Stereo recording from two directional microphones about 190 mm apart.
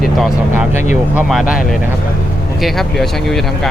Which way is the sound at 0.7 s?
40° left (ahead or behind).